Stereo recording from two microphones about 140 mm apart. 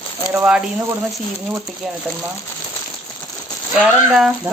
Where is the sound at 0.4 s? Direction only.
10° right (ahead or behind).